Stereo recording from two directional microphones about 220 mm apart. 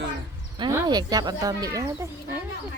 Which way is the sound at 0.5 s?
20° right (ahead or behind).